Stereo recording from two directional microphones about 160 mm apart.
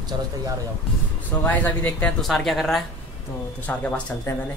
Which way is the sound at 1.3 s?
10° left (ahead or behind).